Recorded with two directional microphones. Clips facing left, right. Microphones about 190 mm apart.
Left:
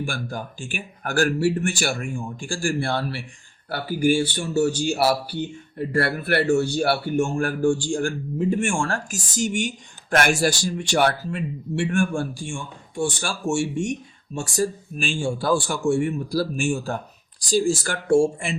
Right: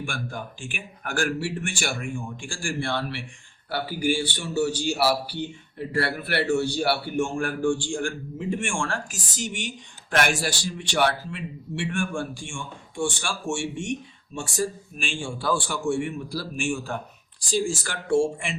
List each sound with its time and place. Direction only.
0.0 s a man's voice: 35° left (ahead or behind)